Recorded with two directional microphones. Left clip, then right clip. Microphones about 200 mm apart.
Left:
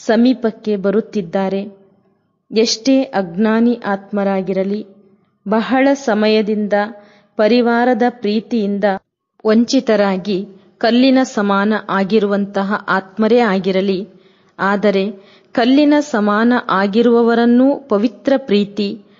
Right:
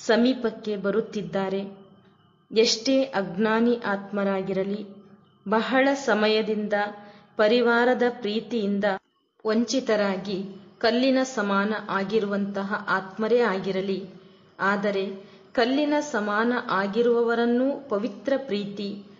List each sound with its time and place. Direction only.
0.0 s a woman's voice: 40° left (ahead or behind)